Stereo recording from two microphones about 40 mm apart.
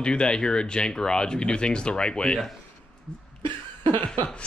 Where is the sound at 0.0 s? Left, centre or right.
Left.